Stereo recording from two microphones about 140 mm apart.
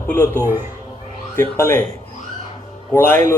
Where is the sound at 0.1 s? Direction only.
15° left (ahead or behind).